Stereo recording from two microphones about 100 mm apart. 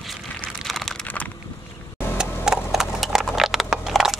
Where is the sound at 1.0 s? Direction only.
15° left (ahead or behind).